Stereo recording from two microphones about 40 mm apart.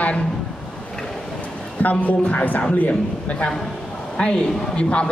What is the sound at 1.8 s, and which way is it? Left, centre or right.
Speech, left.